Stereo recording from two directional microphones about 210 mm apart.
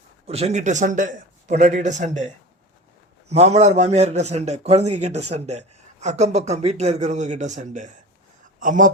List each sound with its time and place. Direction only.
0.3 s speech: 30° right (ahead or behind)